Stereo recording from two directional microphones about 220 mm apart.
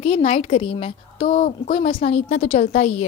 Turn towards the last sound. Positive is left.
turn(degrees=30)  # may be behind; listen again after turning